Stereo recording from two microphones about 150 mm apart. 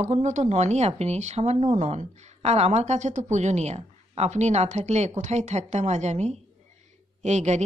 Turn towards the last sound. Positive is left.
turn(degrees=-50)  # may be behind; listen again after turning